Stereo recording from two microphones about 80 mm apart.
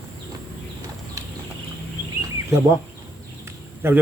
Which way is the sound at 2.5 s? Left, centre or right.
Right.